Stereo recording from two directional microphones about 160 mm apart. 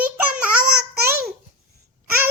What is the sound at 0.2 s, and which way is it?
Child singing, 10° right (ahead or behind).